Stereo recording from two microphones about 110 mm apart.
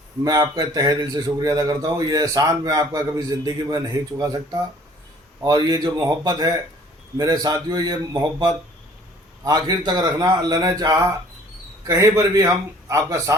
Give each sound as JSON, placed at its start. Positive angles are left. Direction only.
{"t": 0.3, "sound": "a man's voice", "side_deg": -40}